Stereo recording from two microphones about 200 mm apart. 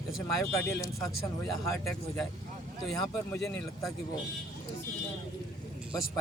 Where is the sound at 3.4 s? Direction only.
Centre (ahead or behind).